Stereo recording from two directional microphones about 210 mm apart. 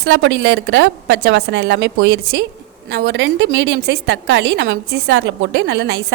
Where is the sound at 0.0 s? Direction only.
55° right (ahead or behind).